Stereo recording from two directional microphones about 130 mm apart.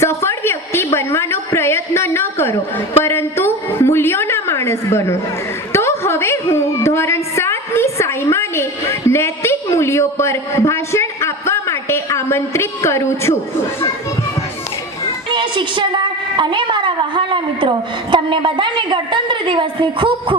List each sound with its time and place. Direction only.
0.0 s a sound: 20° left (ahead or behind)
5.7 s a woman's voice: 20° left (ahead or behind)
15.3 s a woman's voice: 40° right (ahead or behind)